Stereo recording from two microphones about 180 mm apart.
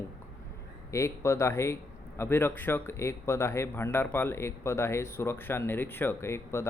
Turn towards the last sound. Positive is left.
turn(degrees=15)  # may be behind; listen again after turning